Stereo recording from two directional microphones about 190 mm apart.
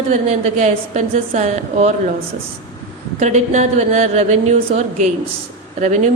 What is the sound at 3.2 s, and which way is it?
A woman's voice, 40° right (ahead or behind).